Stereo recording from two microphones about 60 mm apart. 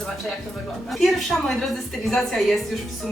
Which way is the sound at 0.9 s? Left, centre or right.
Centre.